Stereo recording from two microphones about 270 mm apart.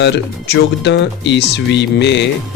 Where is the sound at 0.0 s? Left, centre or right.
Left.